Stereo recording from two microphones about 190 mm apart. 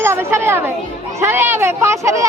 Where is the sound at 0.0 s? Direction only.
15° right (ahead or behind).